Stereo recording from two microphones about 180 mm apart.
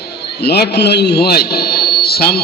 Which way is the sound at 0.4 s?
65° left (ahead or behind).